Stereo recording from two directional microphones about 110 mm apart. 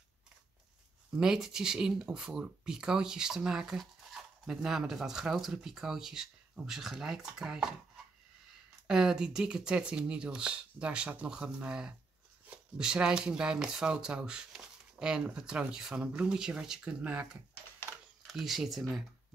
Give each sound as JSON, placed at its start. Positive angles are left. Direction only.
{"t": 1.1, "sound": "speech", "side_deg": -5}
{"t": 8.8, "sound": "speech", "side_deg": -5}